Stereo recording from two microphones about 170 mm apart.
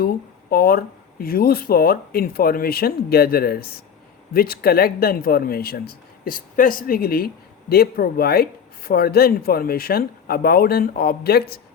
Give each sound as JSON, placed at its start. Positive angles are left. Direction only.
{"t": 0.5, "sound": "speech", "side_deg": 60}